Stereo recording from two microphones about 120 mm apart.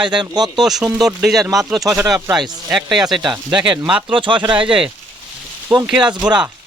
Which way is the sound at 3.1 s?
40° right (ahead or behind).